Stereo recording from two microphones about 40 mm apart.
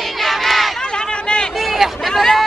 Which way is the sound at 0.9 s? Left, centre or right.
Left.